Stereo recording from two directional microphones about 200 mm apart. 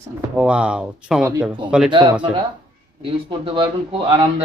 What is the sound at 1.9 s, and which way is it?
Speech, 25° right (ahead or behind).